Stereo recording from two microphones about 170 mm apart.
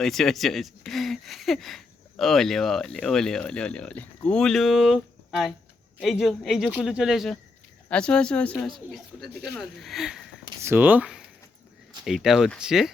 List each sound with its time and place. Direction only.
0.0 s speech: centre (ahead or behind)
10.4 s a sound: 25° right (ahead or behind)
10.7 s speech: 10° right (ahead or behind)